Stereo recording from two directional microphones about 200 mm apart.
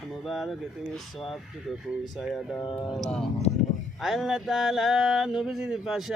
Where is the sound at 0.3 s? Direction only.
Centre (ahead or behind).